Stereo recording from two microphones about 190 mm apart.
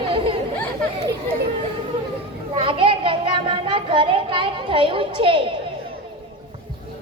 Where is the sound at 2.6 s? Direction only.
25° right (ahead or behind).